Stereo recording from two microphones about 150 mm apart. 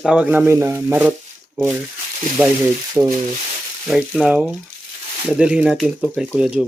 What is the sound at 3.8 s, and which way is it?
Speech, centre (ahead or behind).